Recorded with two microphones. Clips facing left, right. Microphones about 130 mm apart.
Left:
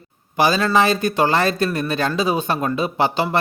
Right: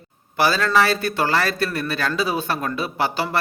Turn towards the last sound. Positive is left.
turn(degrees=20)  # may be behind; listen again after turning